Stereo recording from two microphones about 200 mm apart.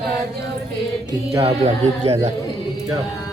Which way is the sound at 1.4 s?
30° right (ahead or behind).